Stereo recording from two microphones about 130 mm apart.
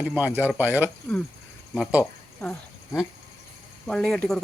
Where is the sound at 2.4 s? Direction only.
10° left (ahead or behind).